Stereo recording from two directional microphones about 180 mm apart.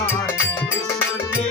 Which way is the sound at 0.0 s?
15° left (ahead or behind).